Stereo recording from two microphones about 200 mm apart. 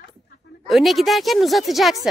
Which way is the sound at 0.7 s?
Centre (ahead or behind).